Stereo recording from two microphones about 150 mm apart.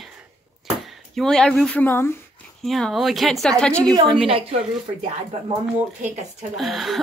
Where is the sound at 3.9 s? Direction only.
25° right (ahead or behind).